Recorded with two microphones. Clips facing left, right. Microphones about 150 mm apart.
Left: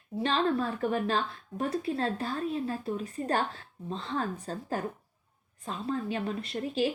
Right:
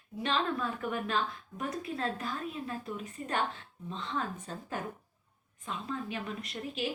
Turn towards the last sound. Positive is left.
turn(degrees=30)  # may be behind; listen again after turning